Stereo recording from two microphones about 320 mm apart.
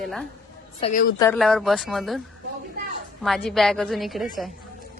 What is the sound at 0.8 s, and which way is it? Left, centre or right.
Speech, left.